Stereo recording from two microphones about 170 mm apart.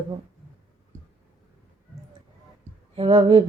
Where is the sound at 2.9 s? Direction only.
35° right (ahead or behind).